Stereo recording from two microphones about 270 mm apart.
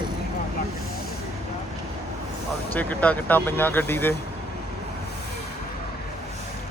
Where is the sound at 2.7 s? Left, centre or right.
Centre.